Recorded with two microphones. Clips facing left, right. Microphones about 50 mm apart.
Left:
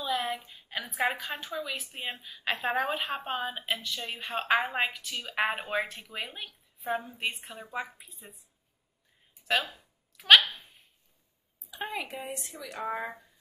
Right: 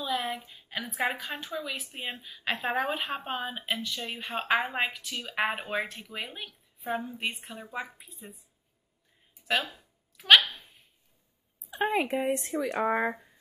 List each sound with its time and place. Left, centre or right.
0.0 s a woman's voice: centre
9.5 s a sound: centre
11.7 s a woman's voice: right
12.8 s speech: centre